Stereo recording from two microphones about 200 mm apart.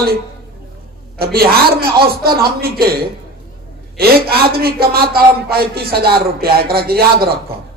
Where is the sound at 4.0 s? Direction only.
50° right (ahead or behind).